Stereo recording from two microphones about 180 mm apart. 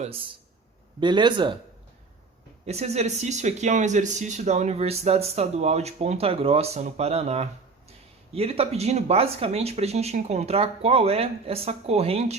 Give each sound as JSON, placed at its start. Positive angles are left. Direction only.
{"t": 0.0, "sound": "speech", "side_deg": -30}
{"t": 2.6, "sound": "speech", "side_deg": -35}